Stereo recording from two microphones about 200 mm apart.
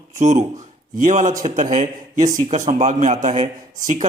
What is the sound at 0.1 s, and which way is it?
A man's voice, 35° right (ahead or behind).